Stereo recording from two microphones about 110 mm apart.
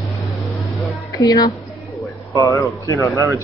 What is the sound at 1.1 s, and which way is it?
A woman's voice, 35° left (ahead or behind).